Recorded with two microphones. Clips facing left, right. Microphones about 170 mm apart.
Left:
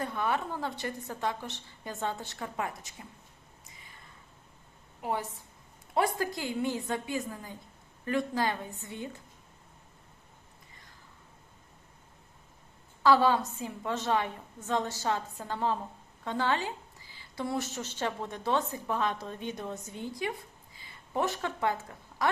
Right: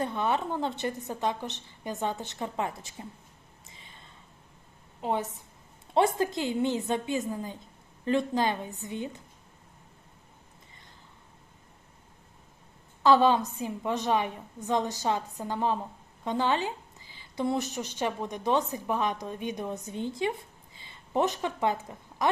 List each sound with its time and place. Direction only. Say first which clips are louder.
0.0 s a woman's voice: right 3 dB; 20° right (ahead or behind)
3.7 s a sound: right 3 dB; 25° right (ahead or behind)
4.9 s a woman's voice: right 3 dB; 20° right (ahead or behind)
13.0 s a woman's voice: right 2 dB; 20° right (ahead or behind)